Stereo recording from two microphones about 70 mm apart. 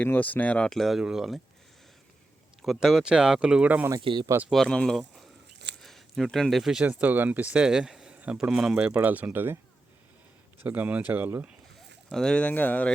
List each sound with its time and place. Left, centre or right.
0.0 s speech: left
0.7 s speech: centre
2.6 s speech: centre
4.5 s speech: centre
4.9 s a sound: centre
5.8 s speech: centre
6.8 s speech: right; by 8.1 s centre
8.1 s a sound: centre
8.4 s speech: centre
8.9 s speech: right
10.6 s speech: right
12.1 s speech: centre
12.5 s speech: left